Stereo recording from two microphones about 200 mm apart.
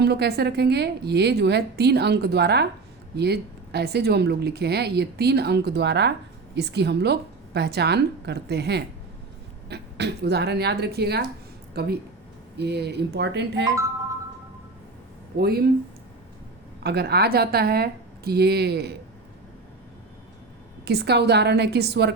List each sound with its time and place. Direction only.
0.0 s speech: 55° right (ahead or behind)
15.4 s speech: 50° right (ahead or behind)
16.8 s speech: 55° right (ahead or behind)
20.8 s speech: 55° right (ahead or behind)